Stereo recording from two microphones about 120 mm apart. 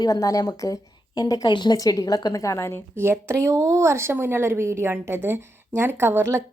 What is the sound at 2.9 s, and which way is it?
A woman's voice, 20° right (ahead or behind).